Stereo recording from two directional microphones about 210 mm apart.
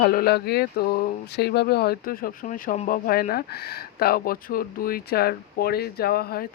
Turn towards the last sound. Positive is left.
turn(degrees=45)  # may be behind; listen again after turning